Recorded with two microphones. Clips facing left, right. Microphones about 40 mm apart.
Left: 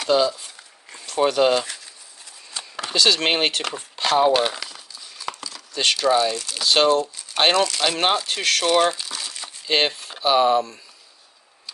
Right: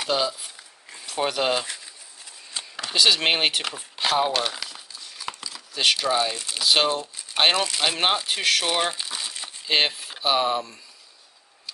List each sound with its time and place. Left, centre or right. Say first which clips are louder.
0.0 s speech: left 6 dB; centre
4.3 s speech: left 6 dB; centre
4.6 s crumpling: left 1 dB; centre
6.3 s speech: left 3 dB; right
6.6 s speech: left 4 dB; centre
9.0 s crumpling: even; centre
9.7 s speech: left 2 dB; centre